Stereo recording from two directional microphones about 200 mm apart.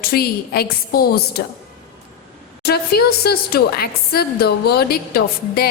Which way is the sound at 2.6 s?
50° left (ahead or behind).